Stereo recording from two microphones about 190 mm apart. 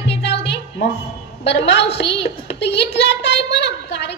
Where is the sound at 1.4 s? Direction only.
65° left (ahead or behind).